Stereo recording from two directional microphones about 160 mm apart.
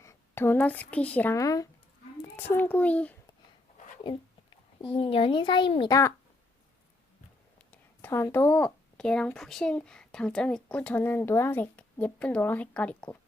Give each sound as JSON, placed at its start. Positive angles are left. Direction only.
{"t": 0.0, "sound": "speech", "side_deg": 15}
{"t": 4.8, "sound": "speech", "side_deg": 35}
{"t": 5.9, "sound": "speech", "side_deg": 20}
{"t": 7.7, "sound": "speech", "side_deg": 15}